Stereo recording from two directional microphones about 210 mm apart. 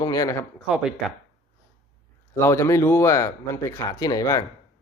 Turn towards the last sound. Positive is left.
turn(degrees=15)  # may be behind; listen again after turning